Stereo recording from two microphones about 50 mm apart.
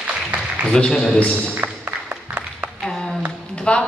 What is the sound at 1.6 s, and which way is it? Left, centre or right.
Music, right.